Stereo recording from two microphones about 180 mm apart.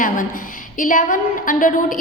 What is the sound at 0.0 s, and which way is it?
A woman's voice, 50° left (ahead or behind).